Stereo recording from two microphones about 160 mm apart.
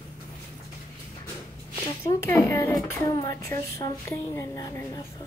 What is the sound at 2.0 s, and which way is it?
Speech, 15° left (ahead or behind).